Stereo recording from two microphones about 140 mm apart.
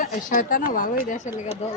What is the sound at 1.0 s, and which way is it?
Speech, 65° left (ahead or behind).